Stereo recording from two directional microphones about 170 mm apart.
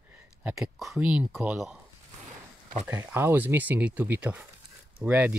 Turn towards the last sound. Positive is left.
turn(degrees=-10)  # may be behind; listen again after turning